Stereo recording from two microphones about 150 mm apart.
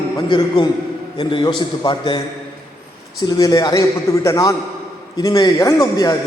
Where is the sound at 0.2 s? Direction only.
30° left (ahead or behind).